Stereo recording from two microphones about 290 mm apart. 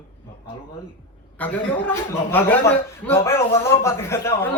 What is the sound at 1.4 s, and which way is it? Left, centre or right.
A man's voice, centre.